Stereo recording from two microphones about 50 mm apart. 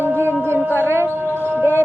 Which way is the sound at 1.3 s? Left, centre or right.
Right.